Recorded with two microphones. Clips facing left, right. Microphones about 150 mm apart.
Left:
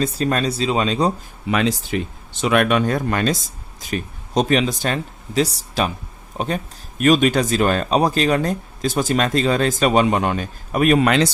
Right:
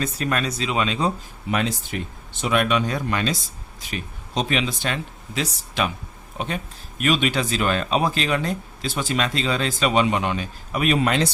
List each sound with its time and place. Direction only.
0.0 s speech: 30° left (ahead or behind)
1.5 s speech: 90° left
2.4 s speech: 60° left (ahead or behind)
11.0 s speech: 75° left (ahead or behind)